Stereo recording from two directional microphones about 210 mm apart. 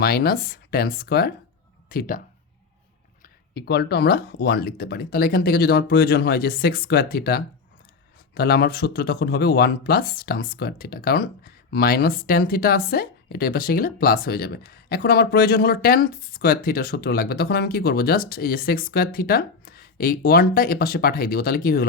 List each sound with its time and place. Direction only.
0.0 s speech: 45° left (ahead or behind)
3.5 s speech: 50° left (ahead or behind)